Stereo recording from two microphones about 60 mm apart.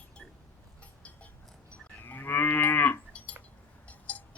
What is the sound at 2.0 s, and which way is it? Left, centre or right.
Cattle, left.